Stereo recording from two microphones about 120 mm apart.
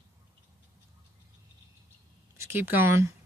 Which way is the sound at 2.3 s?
20° right (ahead or behind).